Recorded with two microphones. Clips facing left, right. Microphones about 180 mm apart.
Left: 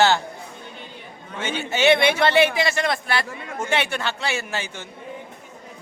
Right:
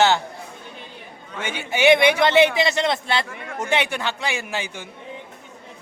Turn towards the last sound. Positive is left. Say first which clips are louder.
# even
turn(degrees=-15)  # may be behind; listen again after turning